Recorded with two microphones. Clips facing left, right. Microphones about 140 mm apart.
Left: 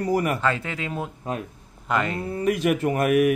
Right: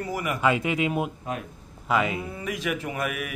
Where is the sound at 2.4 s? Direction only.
50° left (ahead or behind).